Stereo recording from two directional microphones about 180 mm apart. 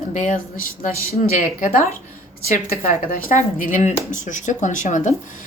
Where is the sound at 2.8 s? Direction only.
45° left (ahead or behind).